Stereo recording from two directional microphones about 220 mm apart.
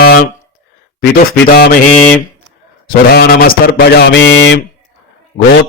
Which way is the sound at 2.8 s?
45° left (ahead or behind).